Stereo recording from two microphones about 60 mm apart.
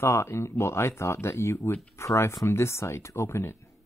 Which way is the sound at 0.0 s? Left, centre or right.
Left.